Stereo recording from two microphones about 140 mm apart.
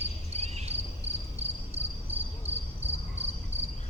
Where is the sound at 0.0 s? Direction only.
50° right (ahead or behind).